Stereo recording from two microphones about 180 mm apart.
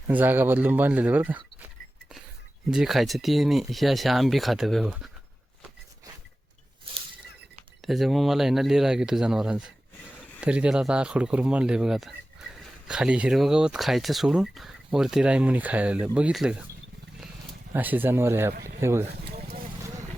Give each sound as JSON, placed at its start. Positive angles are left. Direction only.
{"t": 0.1, "sound": "speech", "side_deg": -10}
{"t": 2.6, "sound": "speech", "side_deg": 0}
{"t": 6.9, "sound": "a sound", "side_deg": -30}
{"t": 7.8, "sound": "speech", "side_deg": 0}
{"t": 17.7, "sound": "speech", "side_deg": -10}